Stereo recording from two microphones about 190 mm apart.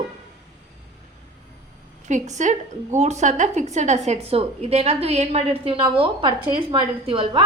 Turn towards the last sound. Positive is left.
turn(degrees=-25)  # may be behind; listen again after turning